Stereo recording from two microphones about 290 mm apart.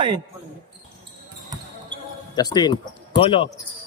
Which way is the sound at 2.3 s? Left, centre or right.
Centre.